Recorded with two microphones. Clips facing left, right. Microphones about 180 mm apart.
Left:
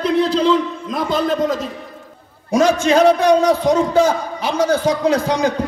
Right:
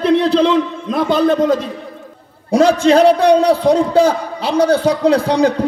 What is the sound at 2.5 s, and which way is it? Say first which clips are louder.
A man's voice: right 3 dB; 35° right (ahead or behind).